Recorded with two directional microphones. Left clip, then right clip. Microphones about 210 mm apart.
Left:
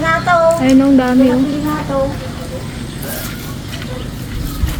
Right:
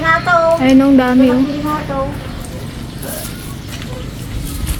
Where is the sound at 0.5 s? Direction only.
15° right (ahead or behind).